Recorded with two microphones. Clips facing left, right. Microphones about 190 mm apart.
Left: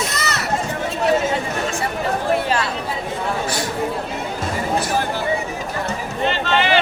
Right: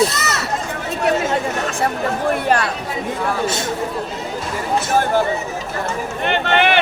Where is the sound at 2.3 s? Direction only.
55° right (ahead or behind).